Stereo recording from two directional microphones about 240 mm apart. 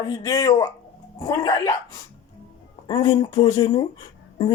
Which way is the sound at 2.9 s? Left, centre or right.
Centre.